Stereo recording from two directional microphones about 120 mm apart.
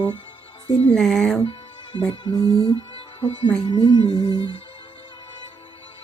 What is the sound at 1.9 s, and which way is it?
Speech, 40° left (ahead or behind).